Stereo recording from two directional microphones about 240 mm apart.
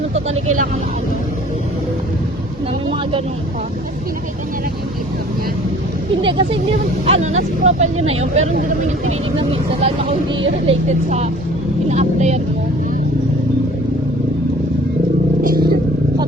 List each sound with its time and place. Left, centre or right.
0.1 s speech: right
6.2 s speech: right
15.4 s vehicle: right